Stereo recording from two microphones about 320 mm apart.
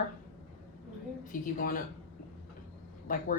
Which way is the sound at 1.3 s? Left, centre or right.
Left.